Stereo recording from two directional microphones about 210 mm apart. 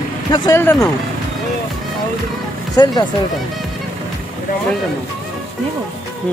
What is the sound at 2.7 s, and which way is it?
Speech, 20° left (ahead or behind).